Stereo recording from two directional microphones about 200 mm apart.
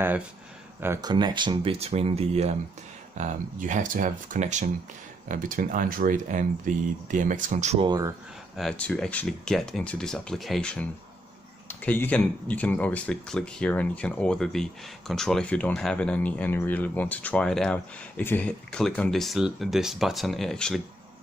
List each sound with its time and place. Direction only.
0.7 s speech: 10° right (ahead or behind)
1.1 s speech: 25° right (ahead or behind)
7.8 s speech: 20° right (ahead or behind)
8.5 s speech: 5° left (ahead or behind)